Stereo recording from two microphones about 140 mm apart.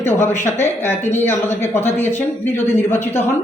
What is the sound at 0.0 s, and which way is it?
A man's voice, 15° left (ahead or behind).